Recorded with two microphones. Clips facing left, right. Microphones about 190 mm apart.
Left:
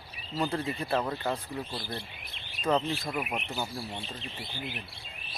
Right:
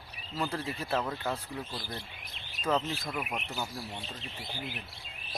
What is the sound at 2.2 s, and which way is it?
Chirp, 40° right (ahead or behind).